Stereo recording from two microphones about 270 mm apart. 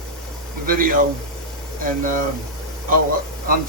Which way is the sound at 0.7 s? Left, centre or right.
Right.